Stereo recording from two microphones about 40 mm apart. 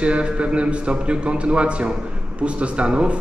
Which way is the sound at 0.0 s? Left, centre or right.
Right.